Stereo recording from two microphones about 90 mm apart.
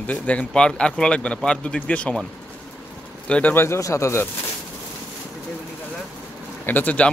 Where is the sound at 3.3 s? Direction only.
20° left (ahead or behind).